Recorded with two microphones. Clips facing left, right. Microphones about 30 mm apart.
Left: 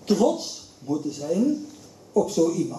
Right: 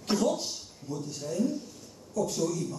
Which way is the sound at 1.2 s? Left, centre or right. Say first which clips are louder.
Left 6 dB; left.